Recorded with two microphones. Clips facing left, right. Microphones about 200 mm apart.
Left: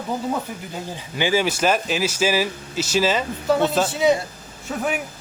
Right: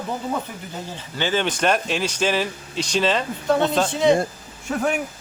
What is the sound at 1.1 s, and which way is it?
Speech, 10° left (ahead or behind).